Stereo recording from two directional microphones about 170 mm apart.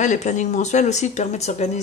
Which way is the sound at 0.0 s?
45° left (ahead or behind).